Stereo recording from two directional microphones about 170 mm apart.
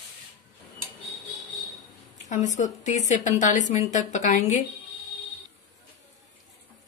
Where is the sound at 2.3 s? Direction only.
45° left (ahead or behind).